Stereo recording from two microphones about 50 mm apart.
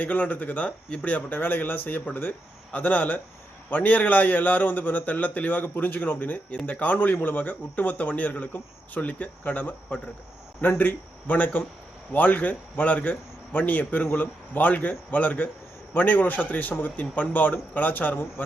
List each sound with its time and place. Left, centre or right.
0.0 s a man's voice: left
1.3 s a man's voice: left